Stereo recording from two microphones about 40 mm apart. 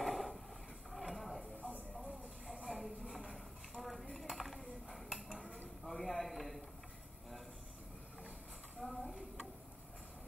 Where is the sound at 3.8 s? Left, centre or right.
Centre.